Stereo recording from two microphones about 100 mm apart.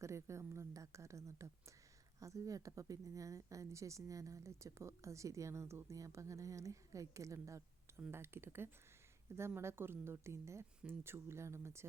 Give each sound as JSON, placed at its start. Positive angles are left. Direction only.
{"t": 0.0, "sound": "a woman's voice", "side_deg": -30}